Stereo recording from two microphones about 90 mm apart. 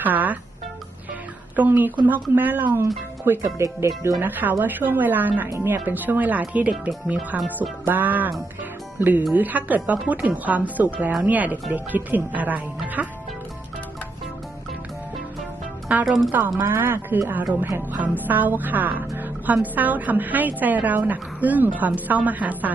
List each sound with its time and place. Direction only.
0.0 s music: 20° right (ahead or behind)
1.5 s a woman's voice: 20° right (ahead or behind)
3.4 s speech: 35° right (ahead or behind)
4.2 s a woman's voice: 20° right (ahead or behind)
16.0 s speech: centre (ahead or behind)
16.6 s a woman's voice: 25° right (ahead or behind)